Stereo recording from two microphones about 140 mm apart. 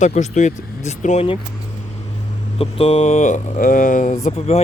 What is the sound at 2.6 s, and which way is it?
Speech, 45° left (ahead or behind).